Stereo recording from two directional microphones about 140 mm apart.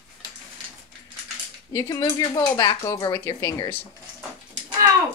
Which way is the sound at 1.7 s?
25° left (ahead or behind).